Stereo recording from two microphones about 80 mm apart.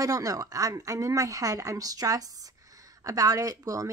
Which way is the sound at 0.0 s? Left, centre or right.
Right.